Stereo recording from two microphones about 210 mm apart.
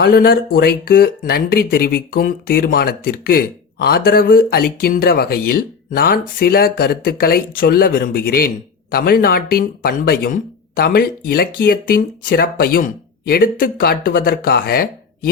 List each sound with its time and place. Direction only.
0.0 s speech: 45° left (ahead or behind)